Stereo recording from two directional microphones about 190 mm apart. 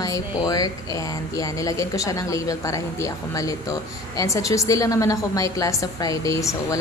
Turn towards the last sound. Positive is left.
turn(degrees=15)  # may be behind; listen again after turning